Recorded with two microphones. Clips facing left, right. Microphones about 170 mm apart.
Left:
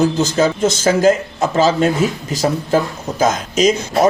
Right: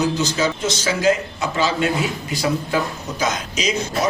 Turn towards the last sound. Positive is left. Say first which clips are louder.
# left 8 dB
turn(degrees=50)  # may be behind; listen again after turning